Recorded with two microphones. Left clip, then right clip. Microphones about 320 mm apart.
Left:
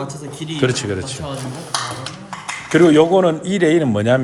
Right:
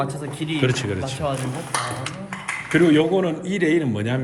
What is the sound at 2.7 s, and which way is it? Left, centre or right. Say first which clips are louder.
Speech: left 6 dB; centre.